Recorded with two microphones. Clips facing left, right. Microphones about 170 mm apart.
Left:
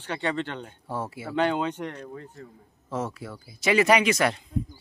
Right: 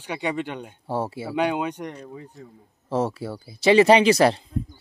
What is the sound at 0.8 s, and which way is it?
Speech, 30° right (ahead or behind).